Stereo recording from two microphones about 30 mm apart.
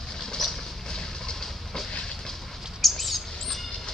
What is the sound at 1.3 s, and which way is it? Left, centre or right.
Train, centre.